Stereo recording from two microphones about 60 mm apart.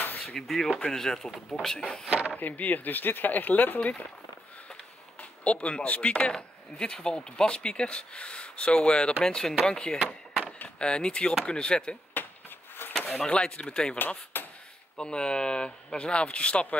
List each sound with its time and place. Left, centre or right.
0.2 s speech: centre
2.0 s speech: right
2.3 s speech: left
5.4 s speech: left
12.1 s a sound: left
13.1 s speech: centre
13.9 s speech: left
15.0 s speech: centre